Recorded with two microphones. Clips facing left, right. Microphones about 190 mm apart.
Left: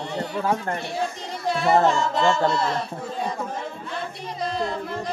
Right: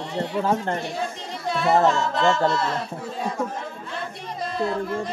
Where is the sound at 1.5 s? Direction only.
Centre (ahead or behind).